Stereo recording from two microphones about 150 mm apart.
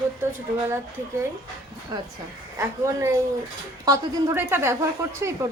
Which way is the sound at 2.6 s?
20° right (ahead or behind).